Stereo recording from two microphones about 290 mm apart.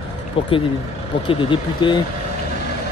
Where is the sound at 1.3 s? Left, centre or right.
Centre.